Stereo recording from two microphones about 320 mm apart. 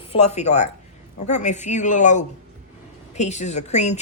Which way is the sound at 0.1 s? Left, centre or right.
Centre.